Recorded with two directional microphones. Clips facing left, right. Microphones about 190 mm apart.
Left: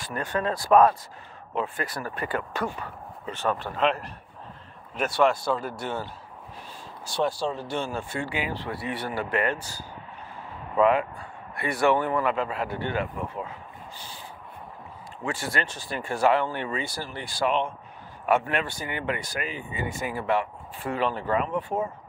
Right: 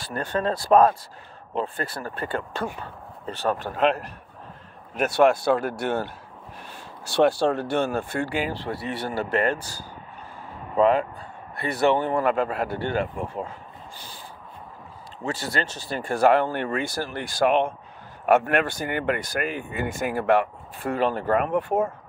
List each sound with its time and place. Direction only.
0.0 s speech: 30° right (ahead or behind); by 5.4 s 50° right (ahead or behind)
5.4 s speech: 70° right (ahead or behind); by 9.6 s 40° right (ahead or behind)
10.8 s speech: 35° right (ahead or behind)
12.1 s speech: 45° right (ahead or behind)
12.6 s speech: 35° right (ahead or behind)
15.2 s speech: 35° right (ahead or behind); by 21.9 s 55° right (ahead or behind)